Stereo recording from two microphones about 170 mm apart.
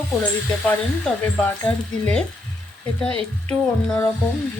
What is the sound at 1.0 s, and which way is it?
Speech, 10° left (ahead or behind).